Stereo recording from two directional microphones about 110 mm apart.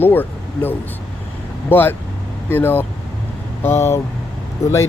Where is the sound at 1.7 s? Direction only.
20° left (ahead or behind).